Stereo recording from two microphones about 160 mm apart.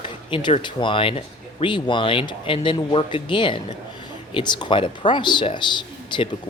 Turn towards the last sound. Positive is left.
turn(degrees=30)  # may be behind; listen again after turning